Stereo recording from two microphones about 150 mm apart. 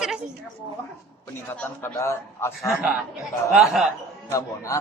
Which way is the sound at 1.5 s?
15° left (ahead or behind).